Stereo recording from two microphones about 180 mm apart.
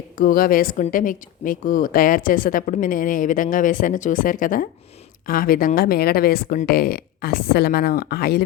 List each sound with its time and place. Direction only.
0.2 s a woman's voice: 50° left (ahead or behind)